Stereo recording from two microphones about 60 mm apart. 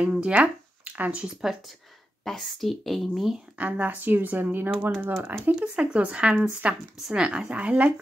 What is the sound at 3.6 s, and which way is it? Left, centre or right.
A woman's voice, right.